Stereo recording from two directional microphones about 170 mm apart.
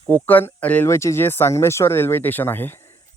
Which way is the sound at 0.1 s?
10° left (ahead or behind).